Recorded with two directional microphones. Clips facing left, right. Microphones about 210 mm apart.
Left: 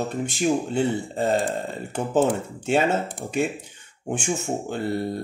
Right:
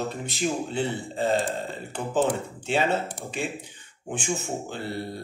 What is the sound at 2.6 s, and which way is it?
Speech, 45° left (ahead or behind).